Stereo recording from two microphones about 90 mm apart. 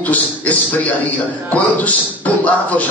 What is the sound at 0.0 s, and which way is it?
Speech, 20° left (ahead or behind).